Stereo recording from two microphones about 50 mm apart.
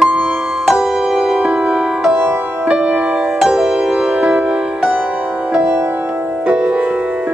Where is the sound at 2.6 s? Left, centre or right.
Right.